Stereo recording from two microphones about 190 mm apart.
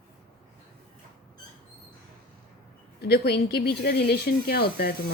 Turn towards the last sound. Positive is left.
turn(degrees=55)  # may be behind; listen again after turning